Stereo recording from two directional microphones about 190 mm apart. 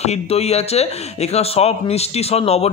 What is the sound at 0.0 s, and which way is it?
A man's voice, 35° left (ahead or behind).